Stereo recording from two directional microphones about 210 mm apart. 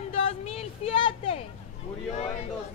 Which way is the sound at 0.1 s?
30° left (ahead or behind).